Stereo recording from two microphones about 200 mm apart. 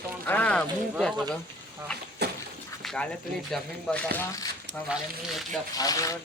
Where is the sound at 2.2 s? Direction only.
55° right (ahead or behind).